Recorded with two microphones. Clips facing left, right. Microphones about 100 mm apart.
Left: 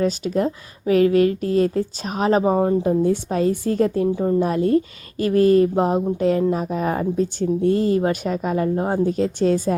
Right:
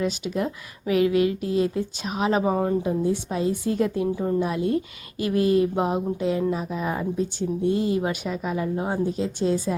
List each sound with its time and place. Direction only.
0.0 s speech: 40° left (ahead or behind)
2.4 s speech: 25° left (ahead or behind)
2.8 s speech: 45° left (ahead or behind)
4.1 s speech: 20° left (ahead or behind)
4.4 s a woman's voice: 45° left (ahead or behind)